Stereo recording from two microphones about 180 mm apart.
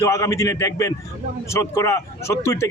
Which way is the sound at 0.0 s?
15° left (ahead or behind).